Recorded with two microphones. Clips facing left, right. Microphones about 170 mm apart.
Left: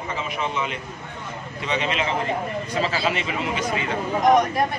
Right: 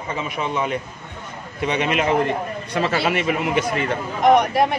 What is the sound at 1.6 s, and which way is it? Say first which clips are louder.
A man's voice: right 4 dB; 55° right (ahead or behind).